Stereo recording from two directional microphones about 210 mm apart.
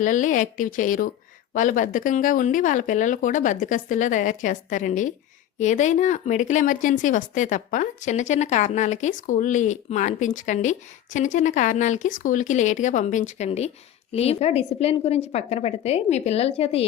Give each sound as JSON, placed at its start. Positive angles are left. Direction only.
{"t": 0.0, "sound": "a woman's voice", "side_deg": 35}